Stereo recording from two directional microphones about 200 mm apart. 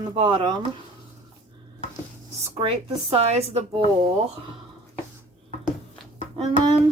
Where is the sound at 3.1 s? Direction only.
30° right (ahead or behind).